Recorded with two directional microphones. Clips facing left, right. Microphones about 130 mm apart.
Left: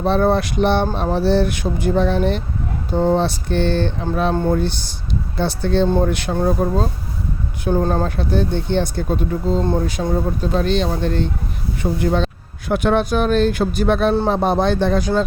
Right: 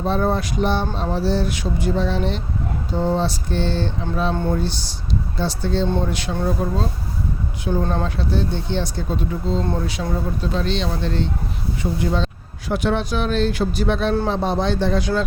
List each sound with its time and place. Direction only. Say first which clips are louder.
0.0 s speech: left 4 dB; 70° left (ahead or behind)
6.3 s speech: left 4 dB; 45° left (ahead or behind)
8.1 s speech: left 3 dB; 55° left (ahead or behind)
10.0 s speech: left 4 dB; 40° left (ahead or behind)